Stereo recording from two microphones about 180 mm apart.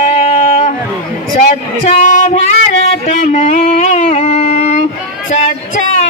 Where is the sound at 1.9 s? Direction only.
45° left (ahead or behind).